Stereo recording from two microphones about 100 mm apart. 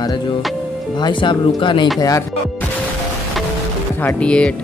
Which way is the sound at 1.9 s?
35° left (ahead or behind).